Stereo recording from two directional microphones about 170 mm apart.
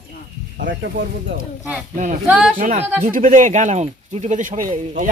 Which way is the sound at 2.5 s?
50° right (ahead or behind).